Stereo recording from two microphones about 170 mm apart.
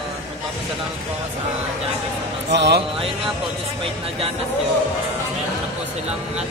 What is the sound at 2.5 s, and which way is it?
Speech, 80° right.